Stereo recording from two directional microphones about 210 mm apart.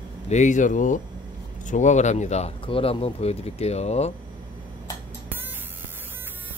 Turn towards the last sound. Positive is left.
turn(degrees=-10)  # may be behind; listen again after turning